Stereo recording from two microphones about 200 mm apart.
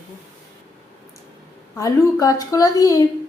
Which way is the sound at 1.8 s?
15° left (ahead or behind).